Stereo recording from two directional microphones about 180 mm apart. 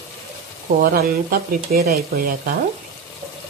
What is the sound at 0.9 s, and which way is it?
Speech, 60° right (ahead or behind).